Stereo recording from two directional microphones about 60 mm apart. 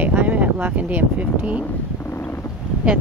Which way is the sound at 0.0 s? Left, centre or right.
Right.